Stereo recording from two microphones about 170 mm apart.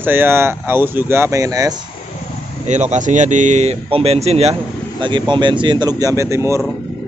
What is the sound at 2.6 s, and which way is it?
Speech, 40° right (ahead or behind).